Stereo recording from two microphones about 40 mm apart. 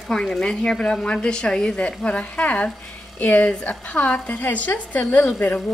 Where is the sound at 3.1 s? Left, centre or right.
Left.